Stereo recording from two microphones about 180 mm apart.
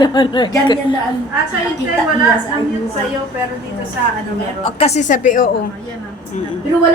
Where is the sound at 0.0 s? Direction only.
25° left (ahead or behind).